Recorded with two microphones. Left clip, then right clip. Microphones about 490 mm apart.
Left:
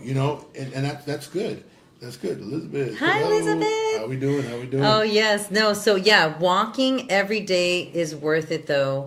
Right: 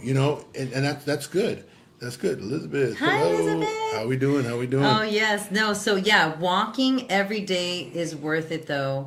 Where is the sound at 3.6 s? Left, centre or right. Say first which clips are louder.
Left 4 dB; centre.